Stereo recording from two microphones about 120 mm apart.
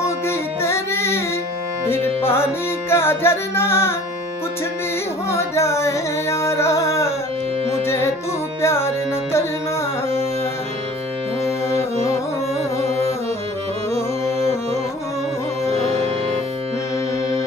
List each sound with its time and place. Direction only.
0.0 s music: 20° left (ahead or behind)
5.3 s music: 20° left (ahead or behind)
13.9 s music: 20° left (ahead or behind)
15.7 s music: 55° right (ahead or behind)